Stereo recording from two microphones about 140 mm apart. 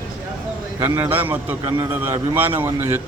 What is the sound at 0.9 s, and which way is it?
Speech, 15° right (ahead or behind).